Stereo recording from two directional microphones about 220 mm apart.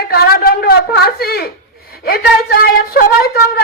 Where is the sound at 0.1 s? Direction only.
45° left (ahead or behind).